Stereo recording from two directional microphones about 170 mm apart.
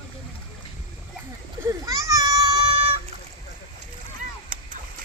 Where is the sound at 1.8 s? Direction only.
20° right (ahead or behind).